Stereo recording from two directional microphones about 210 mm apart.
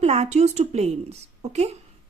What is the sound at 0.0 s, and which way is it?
Speech, 30° right (ahead or behind).